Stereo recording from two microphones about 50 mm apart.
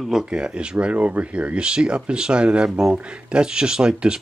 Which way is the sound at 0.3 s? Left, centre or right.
Centre.